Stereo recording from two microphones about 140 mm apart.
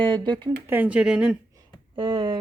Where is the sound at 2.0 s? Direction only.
35° right (ahead or behind).